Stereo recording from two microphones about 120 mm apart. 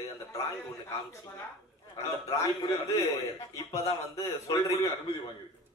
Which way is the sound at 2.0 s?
25° left (ahead or behind).